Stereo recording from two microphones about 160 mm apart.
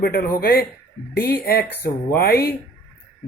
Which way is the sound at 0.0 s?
75° left (ahead or behind).